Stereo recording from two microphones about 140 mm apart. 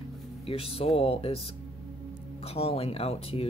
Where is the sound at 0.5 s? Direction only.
45° left (ahead or behind).